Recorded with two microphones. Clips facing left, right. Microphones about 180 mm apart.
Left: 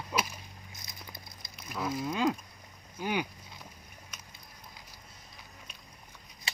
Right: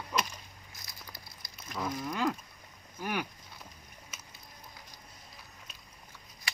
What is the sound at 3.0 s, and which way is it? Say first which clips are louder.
Cattle: left 3 dB; 15° left (ahead or behind).